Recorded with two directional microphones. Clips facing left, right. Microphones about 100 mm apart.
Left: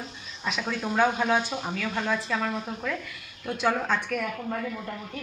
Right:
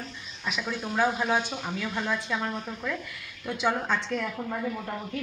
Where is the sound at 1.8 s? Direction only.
5° right (ahead or behind).